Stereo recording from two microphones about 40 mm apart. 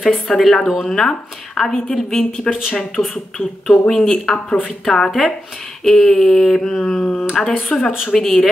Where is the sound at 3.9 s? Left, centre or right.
Centre.